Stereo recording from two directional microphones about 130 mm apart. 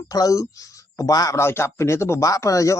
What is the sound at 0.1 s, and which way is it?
Speech, 25° left (ahead or behind).